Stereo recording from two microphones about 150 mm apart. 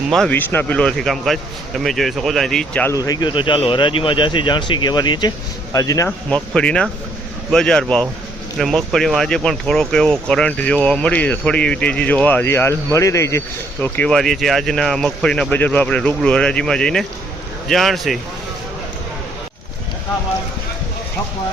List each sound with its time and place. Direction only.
0.1 s speech: centre (ahead or behind)
2.9 s speech: 25° left (ahead or behind)
6.1 s speech: 5° left (ahead or behind)